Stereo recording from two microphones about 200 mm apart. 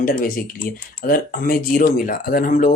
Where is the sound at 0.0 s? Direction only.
45° left (ahead or behind).